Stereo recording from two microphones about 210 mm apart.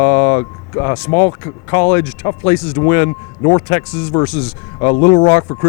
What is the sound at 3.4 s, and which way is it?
Speech, 25° left (ahead or behind).